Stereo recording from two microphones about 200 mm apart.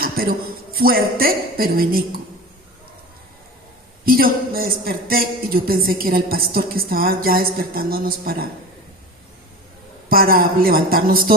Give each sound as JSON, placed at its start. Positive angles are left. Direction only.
{"t": 0.0, "sound": "speech", "side_deg": -45}
{"t": 4.0, "sound": "speech", "side_deg": -45}
{"t": 10.1, "sound": "speech", "side_deg": -50}